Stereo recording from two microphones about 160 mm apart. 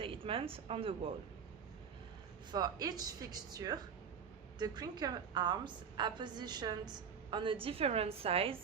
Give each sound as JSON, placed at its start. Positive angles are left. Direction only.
{"t": 0.0, "sound": "speech", "side_deg": -35}
{"t": 2.5, "sound": "a woman's voice", "side_deg": -25}